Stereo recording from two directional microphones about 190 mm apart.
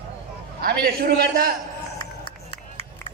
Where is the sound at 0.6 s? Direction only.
55° right (ahead or behind).